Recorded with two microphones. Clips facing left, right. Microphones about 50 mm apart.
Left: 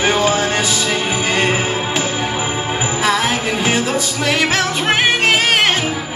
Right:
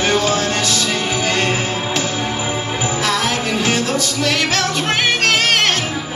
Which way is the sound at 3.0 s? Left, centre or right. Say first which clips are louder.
Left 4 dB; centre.